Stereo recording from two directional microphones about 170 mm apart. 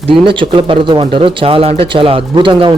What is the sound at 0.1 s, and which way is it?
Speech, 30° right (ahead or behind).